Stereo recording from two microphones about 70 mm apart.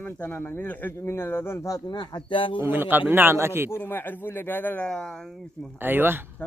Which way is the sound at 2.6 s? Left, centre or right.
Right.